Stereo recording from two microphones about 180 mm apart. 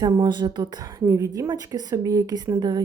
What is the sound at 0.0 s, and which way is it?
A woman's voice, 25° right (ahead or behind).